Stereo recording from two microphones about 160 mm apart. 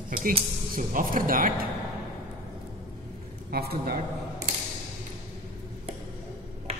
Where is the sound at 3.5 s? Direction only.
70° right (ahead or behind).